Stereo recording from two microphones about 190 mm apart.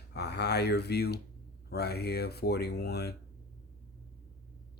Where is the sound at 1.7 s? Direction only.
55° left (ahead or behind).